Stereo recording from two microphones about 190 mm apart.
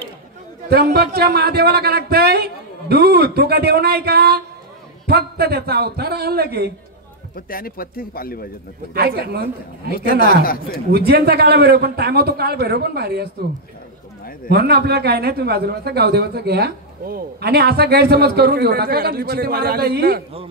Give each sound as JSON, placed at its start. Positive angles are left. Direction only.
{"t": 0.7, "sound": "a man's voice", "side_deg": -55}
{"t": 7.3, "sound": "speech", "side_deg": 50}
{"t": 8.9, "sound": "a man's voice", "side_deg": -55}
{"t": 10.4, "sound": "speech", "side_deg": 50}
{"t": 10.9, "sound": "a man's voice", "side_deg": -55}
{"t": 14.5, "sound": "a man's voice", "side_deg": -55}